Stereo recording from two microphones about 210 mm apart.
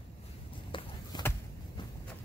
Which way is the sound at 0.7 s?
25° left (ahead or behind).